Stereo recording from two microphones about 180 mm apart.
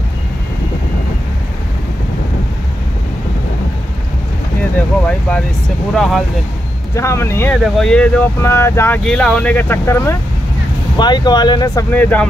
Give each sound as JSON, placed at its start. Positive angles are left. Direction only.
{"t": 5.9, "sound": "speech", "side_deg": 0}
{"t": 7.0, "sound": "speech", "side_deg": 15}
{"t": 7.6, "sound": "speech", "side_deg": 0}